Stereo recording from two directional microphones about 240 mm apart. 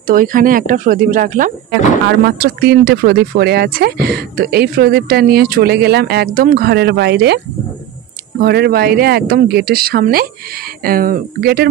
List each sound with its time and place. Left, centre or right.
0.0 s speech: right
8.4 s speech: right